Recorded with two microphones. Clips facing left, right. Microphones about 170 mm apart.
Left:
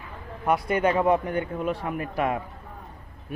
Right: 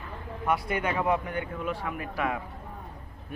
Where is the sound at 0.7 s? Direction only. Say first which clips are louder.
Left 8 dB; 30° left (ahead or behind).